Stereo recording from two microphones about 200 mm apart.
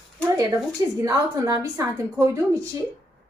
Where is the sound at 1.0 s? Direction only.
15° right (ahead or behind).